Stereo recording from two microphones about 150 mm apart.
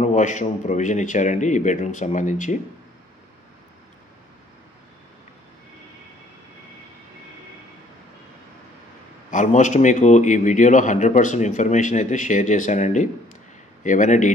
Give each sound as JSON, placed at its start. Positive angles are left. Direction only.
{"t": 0.0, "sound": "a man's voice", "side_deg": 55}
{"t": 9.3, "sound": "a man's voice", "side_deg": 55}